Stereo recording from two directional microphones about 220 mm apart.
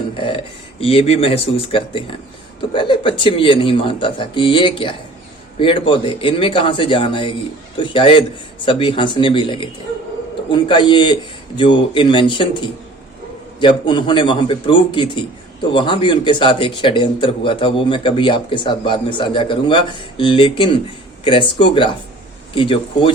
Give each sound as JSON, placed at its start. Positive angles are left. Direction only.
{"t": 0.2, "sound": "speech", "side_deg": 25}